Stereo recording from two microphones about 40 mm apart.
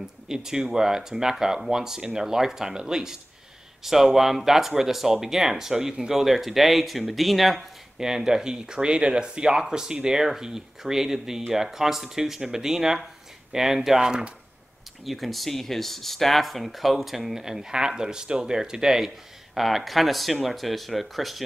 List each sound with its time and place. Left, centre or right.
0.0 s speech: centre
8.0 s speech: centre
15.0 s speech: centre